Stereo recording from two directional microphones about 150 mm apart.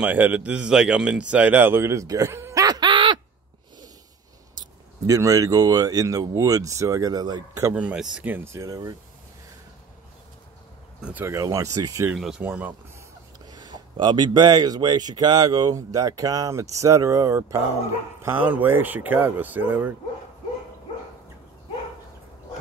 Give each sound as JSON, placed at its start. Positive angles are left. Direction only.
{"t": 0.0, "sound": "speech", "side_deg": -10}
{"t": 4.6, "sound": "speech", "side_deg": -25}
{"t": 7.7, "sound": "speech", "side_deg": -10}
{"t": 11.0, "sound": "speech", "side_deg": -10}
{"t": 12.2, "sound": "speech", "side_deg": -5}
{"t": 13.5, "sound": "speech", "side_deg": -30}